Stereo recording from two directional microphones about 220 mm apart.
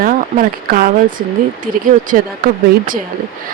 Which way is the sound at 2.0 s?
40° right (ahead or behind).